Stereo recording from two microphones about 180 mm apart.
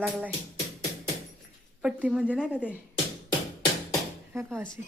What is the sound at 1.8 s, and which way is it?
A woman's voice, 5° right (ahead or behind).